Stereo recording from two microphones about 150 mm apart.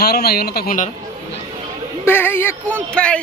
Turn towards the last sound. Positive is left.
turn(degrees=5)  # may be behind; listen again after turning